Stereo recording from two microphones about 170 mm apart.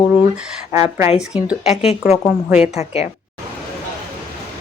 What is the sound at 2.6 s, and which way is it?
Speech, 40° left (ahead or behind).